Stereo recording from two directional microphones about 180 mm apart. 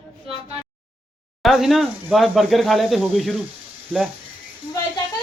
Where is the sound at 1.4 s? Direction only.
Centre (ahead or behind).